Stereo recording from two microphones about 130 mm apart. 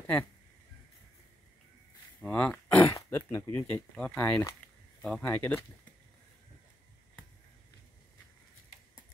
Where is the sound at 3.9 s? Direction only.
10° left (ahead or behind).